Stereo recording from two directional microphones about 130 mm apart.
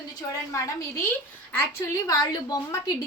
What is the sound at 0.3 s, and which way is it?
A woman's voice, 25° left (ahead or behind).